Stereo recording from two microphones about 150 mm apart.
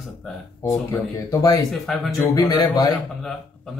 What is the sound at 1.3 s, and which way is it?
Speech, 25° left (ahead or behind).